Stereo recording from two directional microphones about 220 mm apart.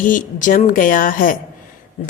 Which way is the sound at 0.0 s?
35° left (ahead or behind).